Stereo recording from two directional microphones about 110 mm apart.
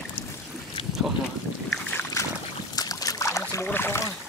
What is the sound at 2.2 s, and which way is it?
Boat, 30° left (ahead or behind).